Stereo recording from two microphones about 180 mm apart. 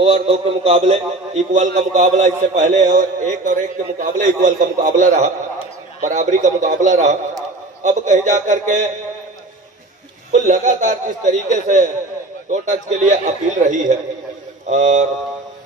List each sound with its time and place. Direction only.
0.0 s a man's voice: 35° right (ahead or behind)
10.3 s a man's voice: 45° right (ahead or behind)